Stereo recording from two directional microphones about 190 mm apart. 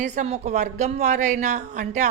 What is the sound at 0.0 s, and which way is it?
A woman's voice, 35° right (ahead or behind).